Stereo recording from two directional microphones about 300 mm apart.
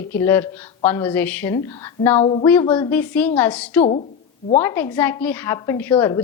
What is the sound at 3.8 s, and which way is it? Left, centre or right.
Speech, left.